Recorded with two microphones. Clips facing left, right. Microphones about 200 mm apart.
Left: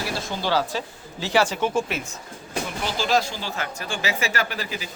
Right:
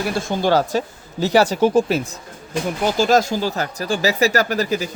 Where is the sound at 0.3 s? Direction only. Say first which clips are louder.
Right 7 dB; 50° right (ahead or behind).